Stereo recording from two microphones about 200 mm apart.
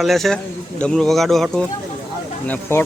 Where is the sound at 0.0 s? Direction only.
Centre (ahead or behind).